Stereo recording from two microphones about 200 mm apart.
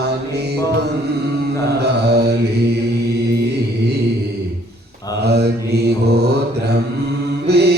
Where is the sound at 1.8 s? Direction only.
55° right (ahead or behind).